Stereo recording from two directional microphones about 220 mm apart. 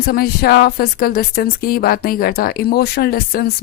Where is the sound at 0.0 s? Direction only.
45° left (ahead or behind).